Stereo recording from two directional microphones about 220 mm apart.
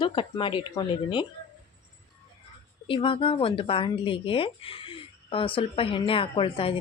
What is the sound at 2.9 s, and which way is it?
Speech, 25° left (ahead or behind).